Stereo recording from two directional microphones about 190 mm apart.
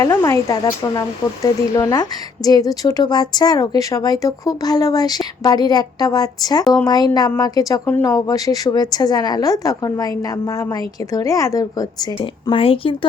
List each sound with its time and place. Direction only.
0.0 s speech: 20° left (ahead or behind)